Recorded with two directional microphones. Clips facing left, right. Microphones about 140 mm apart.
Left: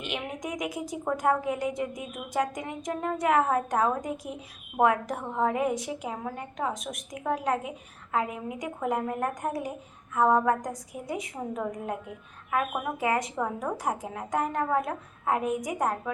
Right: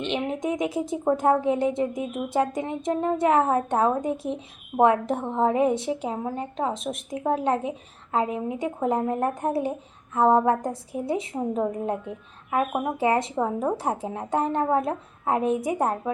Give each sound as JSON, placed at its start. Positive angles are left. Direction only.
{"t": 0.0, "sound": "a woman's voice", "side_deg": -25}